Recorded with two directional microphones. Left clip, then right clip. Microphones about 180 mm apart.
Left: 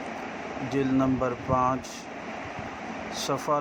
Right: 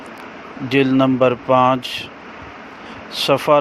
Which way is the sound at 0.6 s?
40° right (ahead or behind).